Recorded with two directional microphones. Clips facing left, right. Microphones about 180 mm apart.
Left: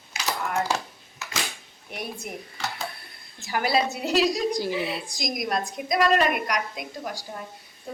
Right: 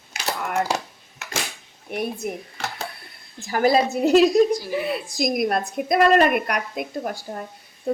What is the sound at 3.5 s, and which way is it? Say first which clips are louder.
A woman's voice: right 6 dB; 45° right (ahead or behind).